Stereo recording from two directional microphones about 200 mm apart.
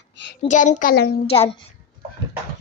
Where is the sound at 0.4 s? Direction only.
35° left (ahead or behind).